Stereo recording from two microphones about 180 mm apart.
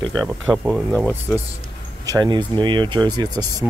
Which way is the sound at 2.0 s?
25° right (ahead or behind).